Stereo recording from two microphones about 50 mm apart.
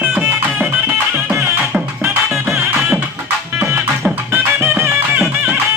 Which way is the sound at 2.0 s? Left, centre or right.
Right.